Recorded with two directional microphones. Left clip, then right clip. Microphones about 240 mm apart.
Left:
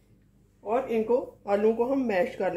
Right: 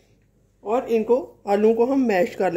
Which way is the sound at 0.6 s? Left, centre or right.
Right.